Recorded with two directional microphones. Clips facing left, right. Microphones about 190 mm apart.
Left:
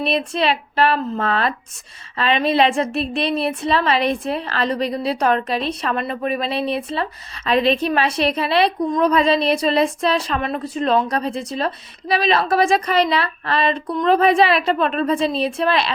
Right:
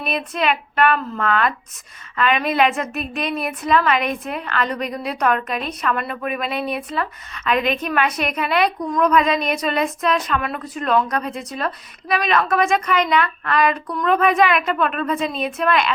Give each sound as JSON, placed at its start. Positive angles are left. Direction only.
{"t": 0.0, "sound": "a woman's voice", "side_deg": 30}